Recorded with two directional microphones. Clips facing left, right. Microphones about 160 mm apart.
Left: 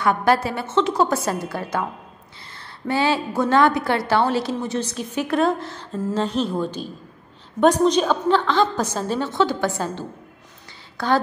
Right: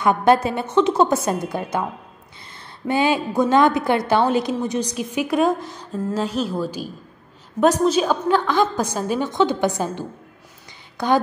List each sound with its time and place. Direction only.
0.0 s a woman's voice: 20° right (ahead or behind)
2.9 s a woman's voice: 15° right (ahead or behind)